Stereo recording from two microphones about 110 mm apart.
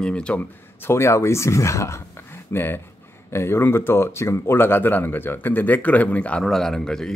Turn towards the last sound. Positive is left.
turn(degrees=5)  # may be behind; listen again after turning